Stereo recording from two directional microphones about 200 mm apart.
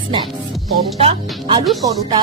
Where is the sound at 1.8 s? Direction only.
20° right (ahead or behind).